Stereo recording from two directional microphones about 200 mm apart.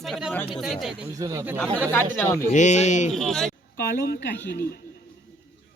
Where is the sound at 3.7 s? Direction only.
50° left (ahead or behind).